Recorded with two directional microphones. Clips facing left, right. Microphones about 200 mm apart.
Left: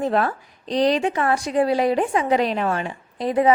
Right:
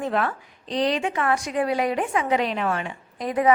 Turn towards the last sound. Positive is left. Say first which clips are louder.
# left 4 dB
turn(degrees=30)  # may be behind; listen again after turning